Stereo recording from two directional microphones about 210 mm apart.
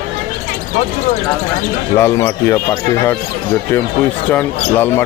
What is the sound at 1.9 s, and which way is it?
Speech, 10° left (ahead or behind).